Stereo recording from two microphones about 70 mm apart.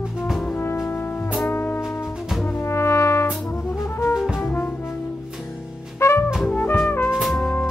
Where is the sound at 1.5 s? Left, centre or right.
Left.